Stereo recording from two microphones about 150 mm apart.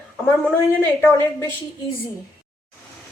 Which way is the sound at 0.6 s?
15° left (ahead or behind).